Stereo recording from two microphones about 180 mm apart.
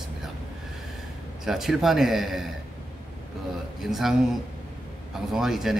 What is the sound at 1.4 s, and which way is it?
A man's voice, centre (ahead or behind).